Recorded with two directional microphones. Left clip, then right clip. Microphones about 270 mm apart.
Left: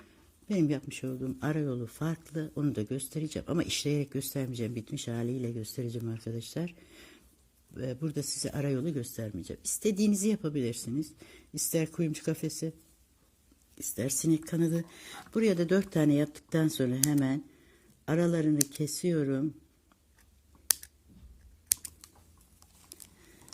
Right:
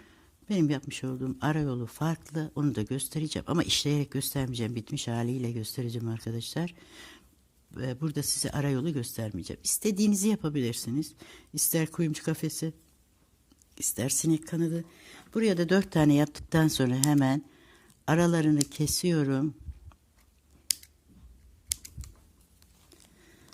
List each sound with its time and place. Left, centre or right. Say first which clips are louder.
0.1 s speech: right 1 dB; centre
13.7 s speech: right 3 dB; centre
15.4 s speech: right 1 dB; centre